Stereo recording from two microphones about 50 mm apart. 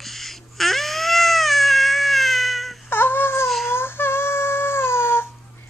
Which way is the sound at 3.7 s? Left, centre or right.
Left.